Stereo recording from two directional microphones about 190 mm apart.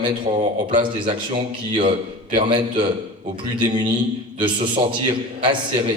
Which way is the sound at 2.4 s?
25° right (ahead or behind).